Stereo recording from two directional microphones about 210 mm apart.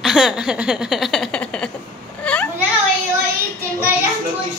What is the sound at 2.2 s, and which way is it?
Children playing, 5° left (ahead or behind).